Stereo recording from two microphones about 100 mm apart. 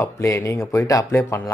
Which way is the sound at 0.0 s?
30° left (ahead or behind).